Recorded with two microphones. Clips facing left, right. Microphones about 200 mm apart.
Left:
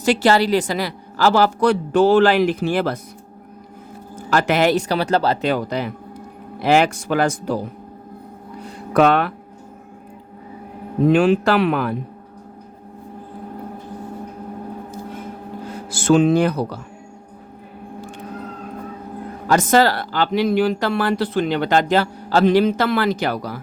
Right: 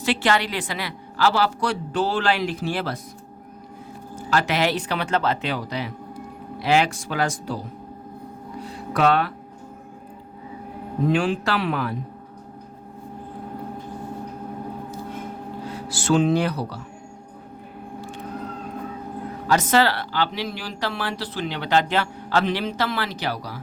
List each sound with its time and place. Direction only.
0.0 s speech: 40° left (ahead or behind)
4.3 s speech: 50° left (ahead or behind)
8.9 s speech: 55° left (ahead or behind)
11.1 s speech: 60° left (ahead or behind)
15.7 s speech: 50° left (ahead or behind)
19.5 s speech: 50° left (ahead or behind)